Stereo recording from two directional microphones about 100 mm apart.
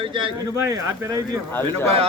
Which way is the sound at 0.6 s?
30° right (ahead or behind).